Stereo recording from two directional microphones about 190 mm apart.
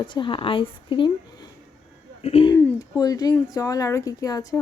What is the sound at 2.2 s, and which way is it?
Speech, 30° left (ahead or behind).